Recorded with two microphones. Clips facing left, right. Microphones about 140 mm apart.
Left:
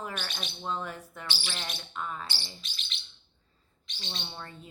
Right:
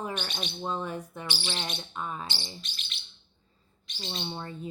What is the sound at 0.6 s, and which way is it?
Speech, 20° right (ahead or behind).